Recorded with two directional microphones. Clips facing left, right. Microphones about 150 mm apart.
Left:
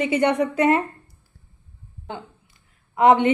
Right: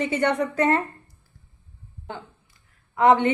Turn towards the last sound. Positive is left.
turn(degrees=20)  # may be behind; listen again after turning